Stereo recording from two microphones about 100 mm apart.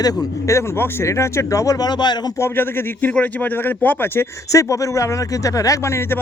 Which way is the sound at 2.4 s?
20° left (ahead or behind).